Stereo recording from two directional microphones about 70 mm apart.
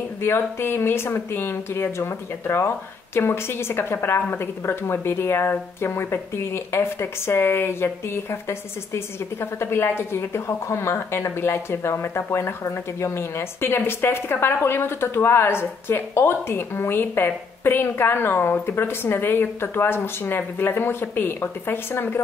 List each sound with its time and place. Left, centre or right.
0.2 s a woman's voice: left